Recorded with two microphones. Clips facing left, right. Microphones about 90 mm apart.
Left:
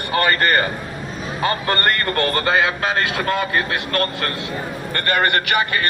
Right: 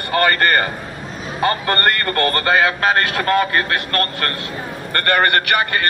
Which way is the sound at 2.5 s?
50° right (ahead or behind).